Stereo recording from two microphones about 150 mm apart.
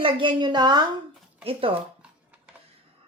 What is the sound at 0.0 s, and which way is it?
Speech, 35° right (ahead or behind).